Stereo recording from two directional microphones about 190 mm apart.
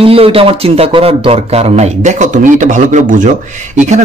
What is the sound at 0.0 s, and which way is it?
Speech, 30° right (ahead or behind).